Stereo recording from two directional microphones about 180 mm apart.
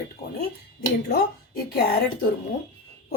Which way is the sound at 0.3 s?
55° left (ahead or behind).